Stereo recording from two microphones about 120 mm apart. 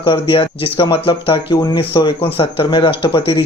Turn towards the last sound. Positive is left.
turn(degrees=45)  # may be behind; listen again after turning